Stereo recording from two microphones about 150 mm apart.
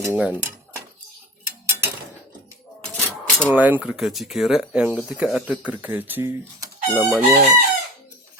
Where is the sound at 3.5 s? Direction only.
10° right (ahead or behind).